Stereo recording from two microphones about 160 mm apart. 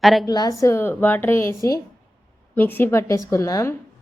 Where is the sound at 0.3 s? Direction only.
25° left (ahead or behind).